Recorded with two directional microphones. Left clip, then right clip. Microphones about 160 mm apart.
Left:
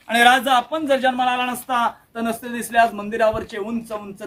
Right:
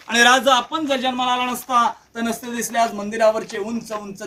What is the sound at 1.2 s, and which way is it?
Speech, 15° right (ahead or behind).